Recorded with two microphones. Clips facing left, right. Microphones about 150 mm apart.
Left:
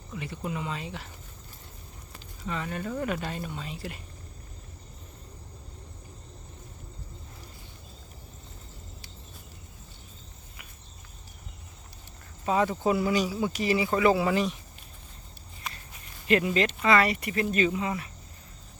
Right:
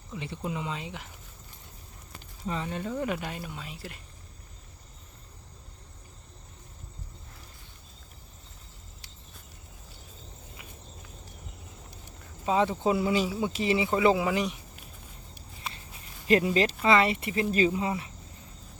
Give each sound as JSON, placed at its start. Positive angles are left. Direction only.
{"t": 0.1, "sound": "speech", "side_deg": -20}
{"t": 2.5, "sound": "speech", "side_deg": -25}
{"t": 12.5, "sound": "speech", "side_deg": -20}
{"t": 15.6, "sound": "walk", "side_deg": -30}
{"t": 16.2, "sound": "speech", "side_deg": -30}